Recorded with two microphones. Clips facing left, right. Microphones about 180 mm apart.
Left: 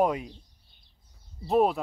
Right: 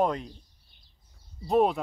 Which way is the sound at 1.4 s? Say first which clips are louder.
Even; centre (ahead or behind).